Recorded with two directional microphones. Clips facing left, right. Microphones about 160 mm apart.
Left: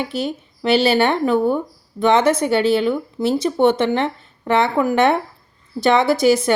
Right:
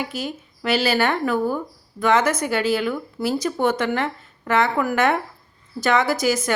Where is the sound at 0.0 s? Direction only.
30° left (ahead or behind).